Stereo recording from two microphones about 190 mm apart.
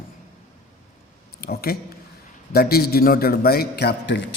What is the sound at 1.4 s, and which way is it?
A man's voice, 55° left (ahead or behind).